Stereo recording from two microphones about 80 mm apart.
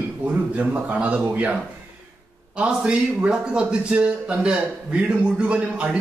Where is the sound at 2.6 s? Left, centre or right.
Centre.